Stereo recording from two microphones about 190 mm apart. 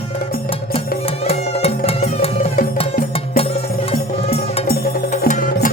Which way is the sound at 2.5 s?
50° left (ahead or behind).